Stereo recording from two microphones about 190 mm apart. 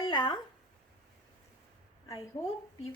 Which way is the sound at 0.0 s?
20° left (ahead or behind).